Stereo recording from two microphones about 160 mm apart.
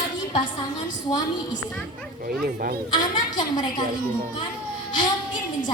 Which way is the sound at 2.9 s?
30° left (ahead or behind).